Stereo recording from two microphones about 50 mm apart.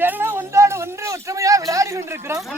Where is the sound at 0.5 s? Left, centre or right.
Right.